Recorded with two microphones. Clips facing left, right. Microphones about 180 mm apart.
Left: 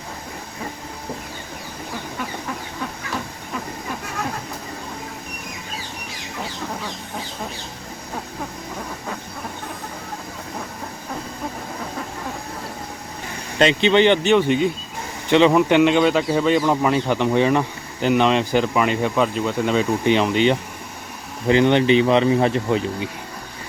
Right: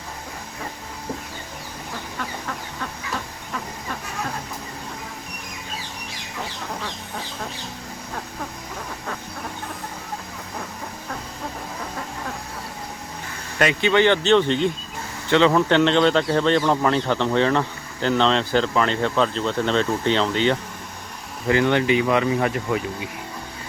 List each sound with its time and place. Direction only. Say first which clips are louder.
13.6 s speech: left 3 dB; 25° left (ahead or behind)